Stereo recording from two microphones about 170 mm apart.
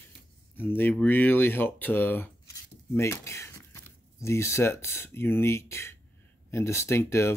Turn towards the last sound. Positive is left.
turn(degrees=15)  # may be behind; listen again after turning